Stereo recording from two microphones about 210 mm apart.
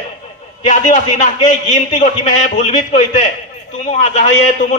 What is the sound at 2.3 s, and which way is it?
A man's voice, 35° left (ahead or behind).